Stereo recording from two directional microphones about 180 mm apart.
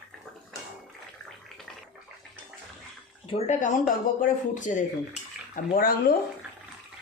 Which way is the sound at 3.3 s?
40° left (ahead or behind).